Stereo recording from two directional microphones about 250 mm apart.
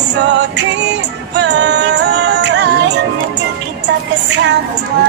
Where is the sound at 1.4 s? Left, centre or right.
Right.